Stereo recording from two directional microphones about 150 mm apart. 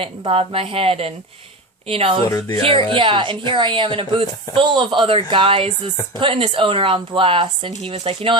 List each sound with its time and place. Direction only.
0.0 s speech: 40° right (ahead or behind)
2.2 s speech: 20° left (ahead or behind)
2.6 s speech: 35° right (ahead or behind)